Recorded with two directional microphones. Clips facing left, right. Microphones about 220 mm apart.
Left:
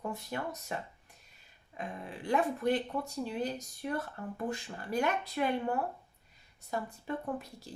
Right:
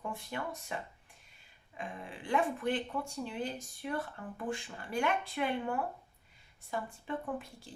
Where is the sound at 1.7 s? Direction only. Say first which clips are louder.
Left 2 dB; 40° left (ahead or behind).